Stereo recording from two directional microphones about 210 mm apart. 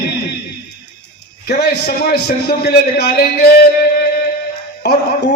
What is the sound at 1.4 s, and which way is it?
A man's voice, 50° left (ahead or behind).